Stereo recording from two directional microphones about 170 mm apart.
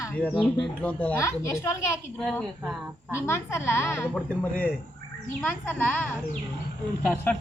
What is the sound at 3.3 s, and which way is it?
Speech, 15° left (ahead or behind).